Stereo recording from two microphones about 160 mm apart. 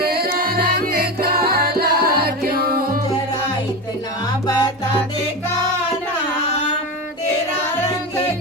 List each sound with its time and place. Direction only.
0.2 s music: 65° right (ahead or behind)
4.4 s music: 20° left (ahead or behind)